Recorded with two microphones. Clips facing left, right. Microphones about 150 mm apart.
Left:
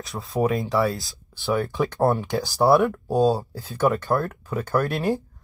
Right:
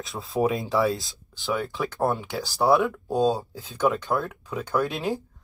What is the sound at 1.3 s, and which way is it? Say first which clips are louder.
Speech: left 4 dB; 15° left (ahead or behind).